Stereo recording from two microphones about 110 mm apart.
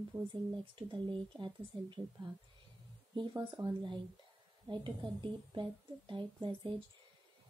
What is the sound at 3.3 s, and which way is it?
Speech, 30° right (ahead or behind).